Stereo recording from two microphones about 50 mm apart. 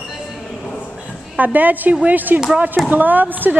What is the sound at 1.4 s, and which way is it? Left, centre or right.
Speech, right.